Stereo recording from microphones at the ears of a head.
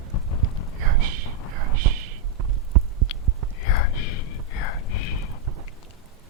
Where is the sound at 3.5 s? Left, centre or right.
Left.